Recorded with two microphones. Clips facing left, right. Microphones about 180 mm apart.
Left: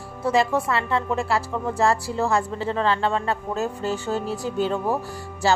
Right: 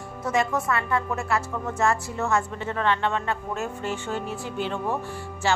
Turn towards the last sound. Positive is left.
turn(degrees=35)  # may be behind; listen again after turning